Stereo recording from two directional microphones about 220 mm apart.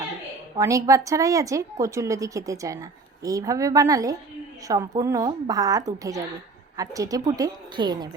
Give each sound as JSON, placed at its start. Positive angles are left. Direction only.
{"t": 0.5, "sound": "a woman's voice", "side_deg": -15}